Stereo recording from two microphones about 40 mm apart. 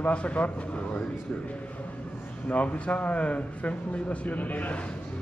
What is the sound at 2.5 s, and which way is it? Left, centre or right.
Speech, left.